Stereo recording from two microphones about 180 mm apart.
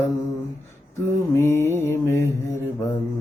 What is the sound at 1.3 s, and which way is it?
Mantra, 15° left (ahead or behind).